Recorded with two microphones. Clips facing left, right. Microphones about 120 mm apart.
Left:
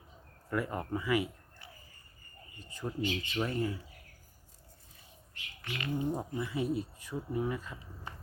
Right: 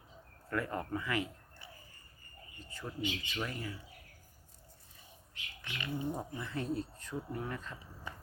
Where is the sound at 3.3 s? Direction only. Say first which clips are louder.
Left 7 dB; 30° left (ahead or behind).